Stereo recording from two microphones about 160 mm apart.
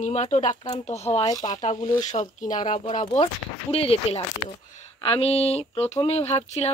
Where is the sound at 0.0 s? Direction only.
45° left (ahead or behind).